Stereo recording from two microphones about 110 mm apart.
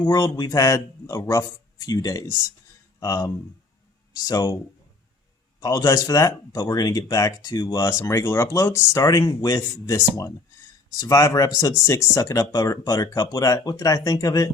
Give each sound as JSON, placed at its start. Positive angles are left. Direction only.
{"t": 0.0, "sound": "speech", "side_deg": 35}
{"t": 5.5, "sound": "speech", "side_deg": 35}